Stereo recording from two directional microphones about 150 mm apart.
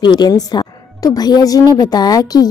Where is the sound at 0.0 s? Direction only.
30° left (ahead or behind).